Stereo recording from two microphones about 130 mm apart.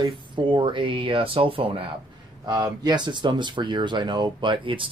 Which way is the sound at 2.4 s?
30° right (ahead or behind).